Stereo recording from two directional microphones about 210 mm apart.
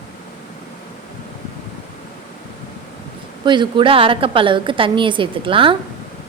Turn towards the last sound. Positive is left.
turn(degrees=-25)  # may be behind; listen again after turning